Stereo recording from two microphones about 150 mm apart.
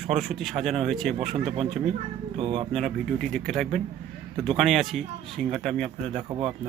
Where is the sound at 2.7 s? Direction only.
Centre (ahead or behind).